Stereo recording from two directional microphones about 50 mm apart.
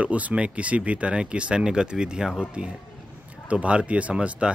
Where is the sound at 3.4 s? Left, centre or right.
Right.